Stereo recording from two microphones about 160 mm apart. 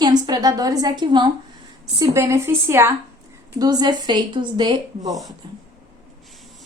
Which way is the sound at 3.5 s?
25° right (ahead or behind).